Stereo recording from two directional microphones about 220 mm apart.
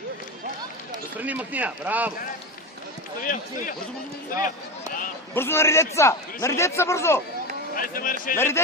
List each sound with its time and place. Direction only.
1.2 s speech: 5° right (ahead or behind)
3.3 s speech: 40° left (ahead or behind)
5.3 s a man's voice: 10° left (ahead or behind)
7.7 s speech: 40° left (ahead or behind)